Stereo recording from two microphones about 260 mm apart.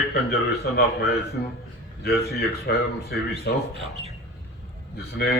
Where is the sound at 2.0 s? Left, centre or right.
Left.